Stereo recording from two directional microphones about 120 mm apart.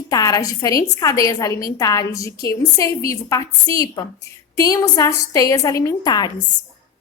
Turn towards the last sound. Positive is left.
turn(degrees=35)  # may be behind; listen again after turning